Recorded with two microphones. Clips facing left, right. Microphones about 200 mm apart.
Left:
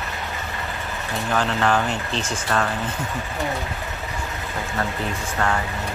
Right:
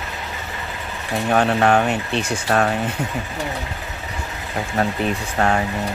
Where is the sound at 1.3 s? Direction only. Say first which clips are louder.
Right 5 dB; 60° right (ahead or behind).